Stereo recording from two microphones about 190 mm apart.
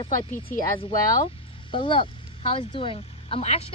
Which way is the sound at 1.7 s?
25° left (ahead or behind).